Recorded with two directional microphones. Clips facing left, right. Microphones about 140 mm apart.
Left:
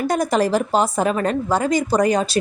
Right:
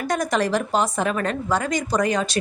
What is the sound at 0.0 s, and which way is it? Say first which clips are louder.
A woman's voice: left 4 dB; 35° left (ahead or behind).